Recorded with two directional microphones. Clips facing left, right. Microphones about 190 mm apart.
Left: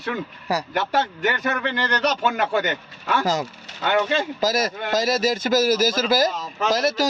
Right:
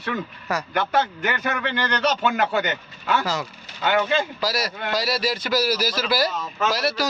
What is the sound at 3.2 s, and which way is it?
A man's voice, 40° left (ahead or behind).